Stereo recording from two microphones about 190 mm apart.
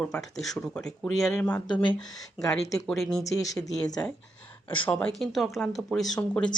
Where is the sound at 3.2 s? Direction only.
20° left (ahead or behind).